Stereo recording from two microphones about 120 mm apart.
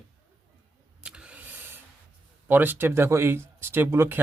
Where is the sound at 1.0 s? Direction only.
10° right (ahead or behind).